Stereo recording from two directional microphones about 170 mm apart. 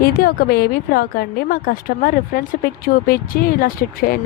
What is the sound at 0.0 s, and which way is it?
A woman's voice, 60° left (ahead or behind).